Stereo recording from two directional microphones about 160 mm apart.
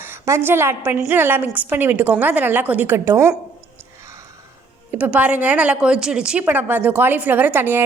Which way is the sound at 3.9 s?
20° right (ahead or behind).